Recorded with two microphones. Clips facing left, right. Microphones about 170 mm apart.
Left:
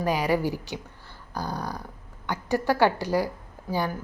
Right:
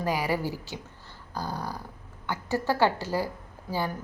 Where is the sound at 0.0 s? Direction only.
20° left (ahead or behind).